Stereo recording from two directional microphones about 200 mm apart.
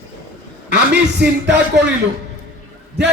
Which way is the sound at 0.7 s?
60° right (ahead or behind).